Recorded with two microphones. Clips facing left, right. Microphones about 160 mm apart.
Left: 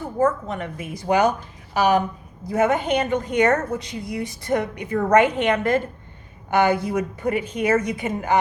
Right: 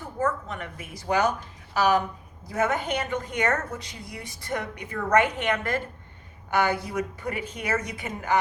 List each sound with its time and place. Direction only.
0.4 s a woman's voice: 20° left (ahead or behind)